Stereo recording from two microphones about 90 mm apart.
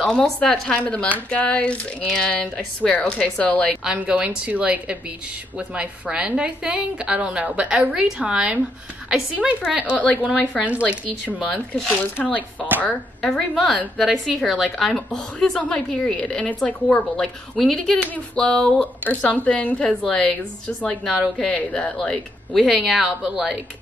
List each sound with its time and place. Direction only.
0.0 s a woman's voice: 5° left (ahead or behind)
3.8 s a woman's voice: 10° right (ahead or behind)
10.3 s a woman's voice: 10° left (ahead or behind)
10.7 s a woman's voice: 15° right (ahead or behind)
12.0 s speech: 20° left (ahead or behind)
13.4 s a woman's voice: centre (ahead or behind)
18.0 s a woman's voice: 15° left (ahead or behind)
22.7 s speech: centre (ahead or behind)